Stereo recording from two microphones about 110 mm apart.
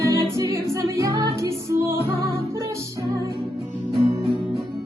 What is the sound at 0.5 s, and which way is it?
Music, 30° right (ahead or behind).